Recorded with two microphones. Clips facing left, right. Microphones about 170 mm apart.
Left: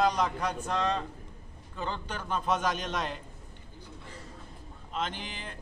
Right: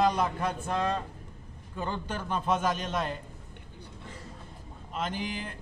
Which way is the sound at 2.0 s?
5° right (ahead or behind).